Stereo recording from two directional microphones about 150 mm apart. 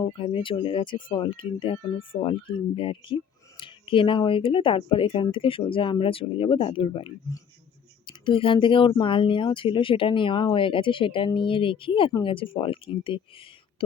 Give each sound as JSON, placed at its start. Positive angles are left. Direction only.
{"t": 0.1, "sound": "speech", "side_deg": 35}